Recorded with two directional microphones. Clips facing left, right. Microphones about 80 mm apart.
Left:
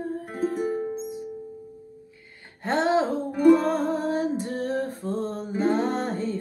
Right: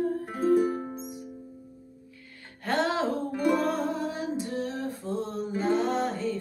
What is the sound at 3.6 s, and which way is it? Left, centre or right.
Music, left.